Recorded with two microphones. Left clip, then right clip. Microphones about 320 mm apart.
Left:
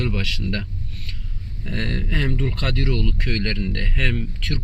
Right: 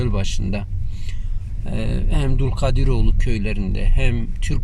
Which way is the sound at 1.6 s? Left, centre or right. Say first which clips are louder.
Left 1 dB; centre.